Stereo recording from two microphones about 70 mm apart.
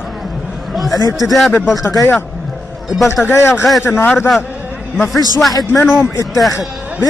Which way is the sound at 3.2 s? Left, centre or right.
Left.